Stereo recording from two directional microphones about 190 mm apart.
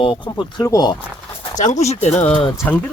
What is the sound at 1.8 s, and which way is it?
Speech, 35° left (ahead or behind).